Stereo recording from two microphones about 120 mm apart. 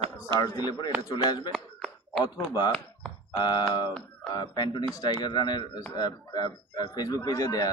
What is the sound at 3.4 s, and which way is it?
Speech, 35° left (ahead or behind).